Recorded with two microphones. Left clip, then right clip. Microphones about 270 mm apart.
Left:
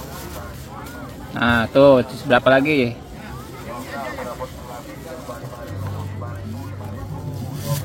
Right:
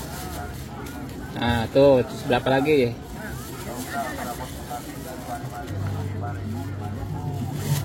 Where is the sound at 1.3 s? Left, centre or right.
Left.